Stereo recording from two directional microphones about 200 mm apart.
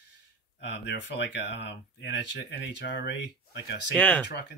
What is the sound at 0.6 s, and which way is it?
Speech, 55° left (ahead or behind).